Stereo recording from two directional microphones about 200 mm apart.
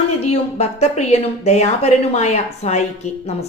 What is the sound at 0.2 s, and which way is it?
A woman's voice, 30° left (ahead or behind).